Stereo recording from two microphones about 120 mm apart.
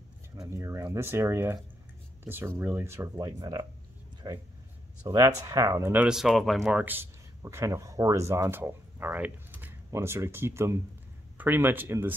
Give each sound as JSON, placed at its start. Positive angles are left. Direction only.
{"t": 0.4, "sound": "speech", "side_deg": -25}
{"t": 6.0, "sound": "speech", "side_deg": -5}
{"t": 6.8, "sound": "speech", "side_deg": -15}